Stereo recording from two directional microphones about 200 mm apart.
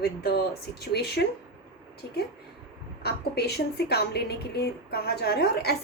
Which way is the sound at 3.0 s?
55° left (ahead or behind).